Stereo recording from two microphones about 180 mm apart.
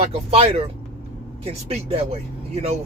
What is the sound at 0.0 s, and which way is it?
Speech, 35° right (ahead or behind).